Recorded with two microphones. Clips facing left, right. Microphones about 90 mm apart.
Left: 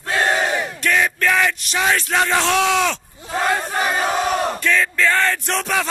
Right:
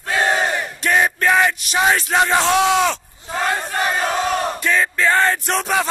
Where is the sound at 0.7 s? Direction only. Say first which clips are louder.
Right 3 dB; 25° right (ahead or behind).